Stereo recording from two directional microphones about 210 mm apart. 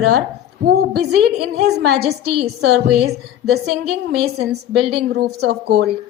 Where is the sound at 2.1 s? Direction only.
50° right (ahead or behind).